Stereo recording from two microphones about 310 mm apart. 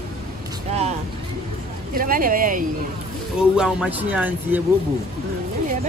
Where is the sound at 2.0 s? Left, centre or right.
Right.